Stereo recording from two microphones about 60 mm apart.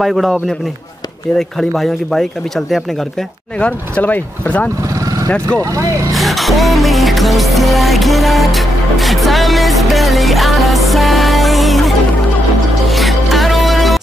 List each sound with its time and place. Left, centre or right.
0.0 s speech: centre
1.6 s speech: centre
3.5 s speech: centre
6.1 s music: centre